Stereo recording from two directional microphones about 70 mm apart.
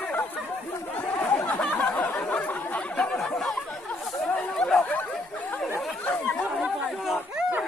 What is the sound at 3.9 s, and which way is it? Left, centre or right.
Chatter, left.